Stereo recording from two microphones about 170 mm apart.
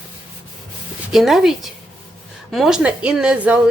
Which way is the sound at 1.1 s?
Centre (ahead or behind).